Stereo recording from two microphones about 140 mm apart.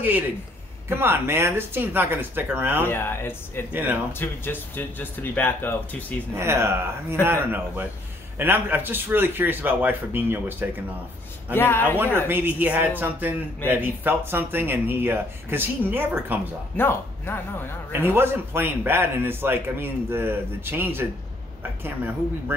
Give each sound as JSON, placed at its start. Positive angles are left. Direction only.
{"t": 0.8, "sound": "speech", "side_deg": -15}
{"t": 2.8, "sound": "speech", "side_deg": 15}
{"t": 3.7, "sound": "speech", "side_deg": -15}
{"t": 4.2, "sound": "speech", "side_deg": 15}
{"t": 6.3, "sound": "speech", "side_deg": -20}
{"t": 11.5, "sound": "speech", "side_deg": 15}
{"t": 12.0, "sound": "speech", "side_deg": -15}
{"t": 16.7, "sound": "speech", "side_deg": 15}
{"t": 17.9, "sound": "speech", "side_deg": -15}